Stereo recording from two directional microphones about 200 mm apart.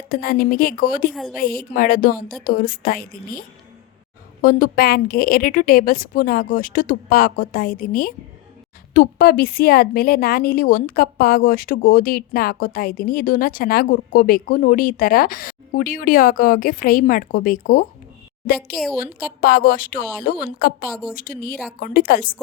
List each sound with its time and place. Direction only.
0.1 s a woman's voice: 45° left (ahead or behind)
1.1 s a woman's voice: centre (ahead or behind)
1.4 s a woman's voice: 45° left (ahead or behind)
4.4 s a woman's voice: 45° left (ahead or behind)
18.9 s a woman's voice: 45° left (ahead or behind)